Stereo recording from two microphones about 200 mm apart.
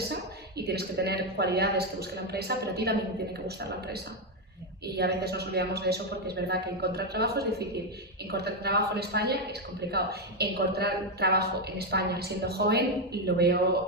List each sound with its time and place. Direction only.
0.6 s a woman's voice: 55° right (ahead or behind)